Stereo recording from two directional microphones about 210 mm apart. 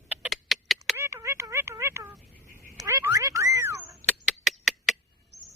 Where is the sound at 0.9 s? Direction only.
10° right (ahead or behind).